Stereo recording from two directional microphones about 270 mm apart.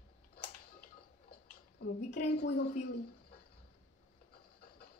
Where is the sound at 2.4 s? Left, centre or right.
Left.